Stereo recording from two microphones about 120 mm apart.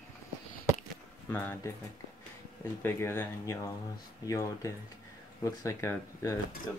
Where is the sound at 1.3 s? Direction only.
15° left (ahead or behind).